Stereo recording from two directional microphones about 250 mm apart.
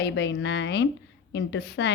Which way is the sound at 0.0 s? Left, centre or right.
Left.